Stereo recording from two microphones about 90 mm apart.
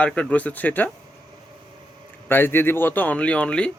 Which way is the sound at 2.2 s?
25° left (ahead or behind).